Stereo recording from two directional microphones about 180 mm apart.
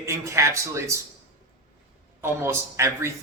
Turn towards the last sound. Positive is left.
turn(degrees=-15)  # may be behind; listen again after turning